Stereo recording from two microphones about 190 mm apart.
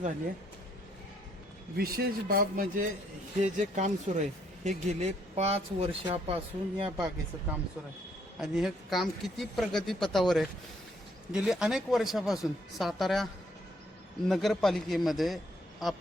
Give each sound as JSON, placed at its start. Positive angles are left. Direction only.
{"t": 1.7, "sound": "a man's voice", "side_deg": -55}
{"t": 8.4, "sound": "speech", "side_deg": 0}
{"t": 14.3, "sound": "speech", "side_deg": 0}